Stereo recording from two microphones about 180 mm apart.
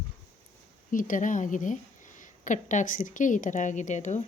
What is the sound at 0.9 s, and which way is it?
A woman's voice, 50° left (ahead or behind).